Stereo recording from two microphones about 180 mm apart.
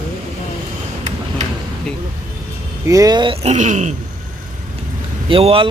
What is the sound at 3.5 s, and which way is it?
Speech, 40° right (ahead or behind).